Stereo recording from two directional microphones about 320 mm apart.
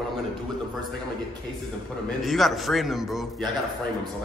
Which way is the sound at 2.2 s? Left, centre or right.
Centre.